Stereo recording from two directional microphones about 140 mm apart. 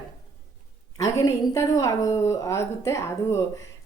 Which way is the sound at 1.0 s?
25° left (ahead or behind).